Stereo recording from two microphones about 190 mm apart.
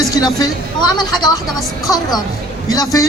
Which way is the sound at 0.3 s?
20° left (ahead or behind).